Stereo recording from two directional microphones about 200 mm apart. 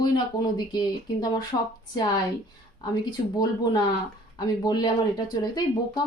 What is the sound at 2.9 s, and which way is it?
A woman's voice, 20° left (ahead or behind).